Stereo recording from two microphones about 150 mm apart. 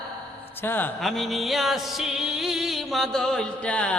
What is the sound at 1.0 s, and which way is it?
Music, centre (ahead or behind).